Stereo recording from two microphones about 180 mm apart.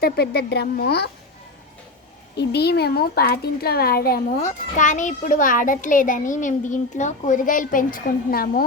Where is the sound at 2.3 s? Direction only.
65° left (ahead or behind).